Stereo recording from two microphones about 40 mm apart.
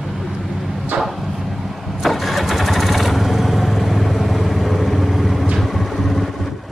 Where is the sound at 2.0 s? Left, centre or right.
Centre.